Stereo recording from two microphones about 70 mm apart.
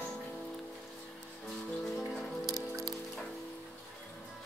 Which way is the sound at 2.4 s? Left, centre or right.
Right.